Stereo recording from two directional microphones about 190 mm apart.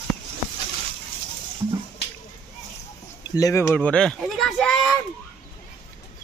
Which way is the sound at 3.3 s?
15° left (ahead or behind).